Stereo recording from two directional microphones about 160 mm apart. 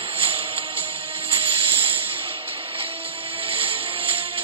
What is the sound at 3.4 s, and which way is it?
Music, 35° right (ahead or behind).